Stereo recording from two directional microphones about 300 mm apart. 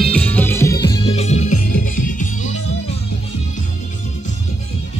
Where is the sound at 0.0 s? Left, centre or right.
Centre; by 2.6 s left.